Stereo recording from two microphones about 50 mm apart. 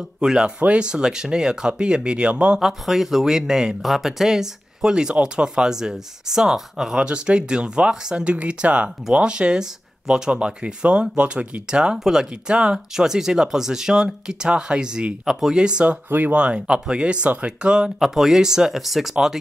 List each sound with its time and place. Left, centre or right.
0.2 s speech: centre
0.6 s speech: right
2.6 s speech: centre
7.0 s speech: centre
16.1 s speech: right
16.3 s speech: right; by 19.1 s centre